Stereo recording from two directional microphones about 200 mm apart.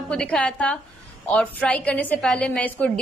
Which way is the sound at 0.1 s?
5° left (ahead or behind).